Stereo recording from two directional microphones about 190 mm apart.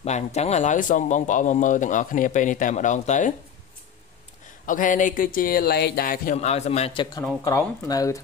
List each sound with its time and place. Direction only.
0.0 s speech: 35° left (ahead or behind)
4.6 s speech: 45° left (ahead or behind)
6.3 s speech: 35° left (ahead or behind); by 8.2 s 15° left (ahead or behind)